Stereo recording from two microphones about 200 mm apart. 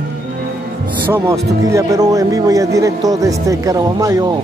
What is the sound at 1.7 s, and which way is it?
Speech, 15° right (ahead or behind).